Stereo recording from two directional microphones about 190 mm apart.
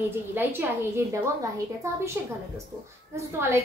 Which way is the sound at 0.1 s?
10° right (ahead or behind).